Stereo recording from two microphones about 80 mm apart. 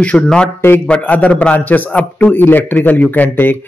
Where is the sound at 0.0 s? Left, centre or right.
Centre.